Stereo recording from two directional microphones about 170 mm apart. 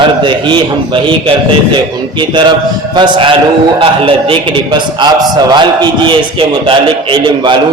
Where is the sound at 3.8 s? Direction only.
30° right (ahead or behind).